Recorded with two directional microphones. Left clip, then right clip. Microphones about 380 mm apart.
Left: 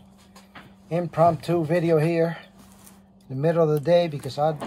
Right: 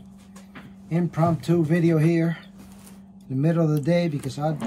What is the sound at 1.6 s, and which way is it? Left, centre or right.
Speech, centre.